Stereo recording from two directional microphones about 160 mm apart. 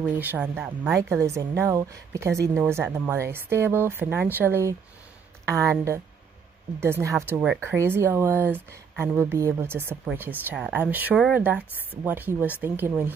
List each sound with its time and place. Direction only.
0.2 s speech: 10° right (ahead or behind)